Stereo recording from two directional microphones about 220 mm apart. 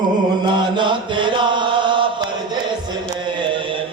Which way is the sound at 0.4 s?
20° right (ahead or behind).